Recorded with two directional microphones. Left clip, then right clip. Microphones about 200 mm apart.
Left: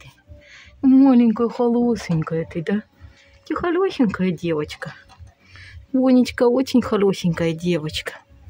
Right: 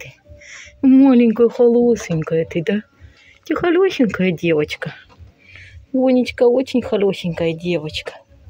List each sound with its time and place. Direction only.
0.0 s speech: 5° right (ahead or behind)
6.0 s speech: 25° left (ahead or behind)